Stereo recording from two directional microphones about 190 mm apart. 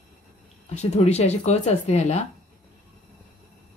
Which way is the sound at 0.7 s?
35° left (ahead or behind).